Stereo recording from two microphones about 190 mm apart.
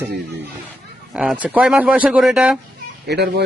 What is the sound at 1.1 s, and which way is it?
Speech, 5° right (ahead or behind).